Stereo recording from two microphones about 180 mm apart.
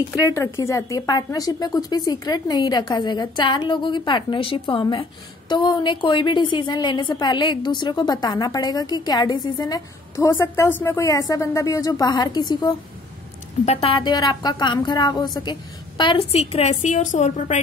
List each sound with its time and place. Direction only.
0.1 s a woman's voice: 15° left (ahead or behind); by 17.6 s 45° left (ahead or behind)